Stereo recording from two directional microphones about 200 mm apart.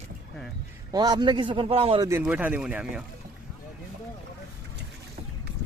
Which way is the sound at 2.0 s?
10° right (ahead or behind).